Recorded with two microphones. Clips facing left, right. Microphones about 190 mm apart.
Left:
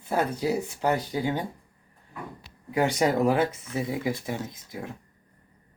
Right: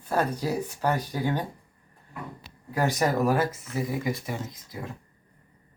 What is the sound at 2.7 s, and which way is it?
Speech, 20° left (ahead or behind).